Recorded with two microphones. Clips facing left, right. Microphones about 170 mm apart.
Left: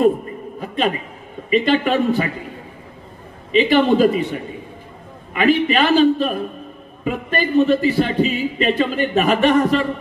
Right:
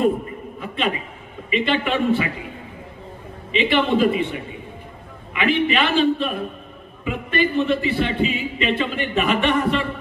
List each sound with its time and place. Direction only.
0.6 s a sound: 40° left (ahead or behind)
1.5 s a man's voice: 40° left (ahead or behind)
3.5 s a man's voice: 40° left (ahead or behind)